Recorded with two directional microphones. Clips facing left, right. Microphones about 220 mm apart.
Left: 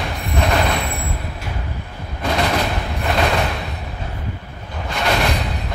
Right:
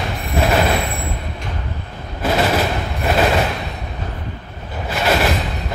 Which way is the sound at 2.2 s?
5° right (ahead or behind).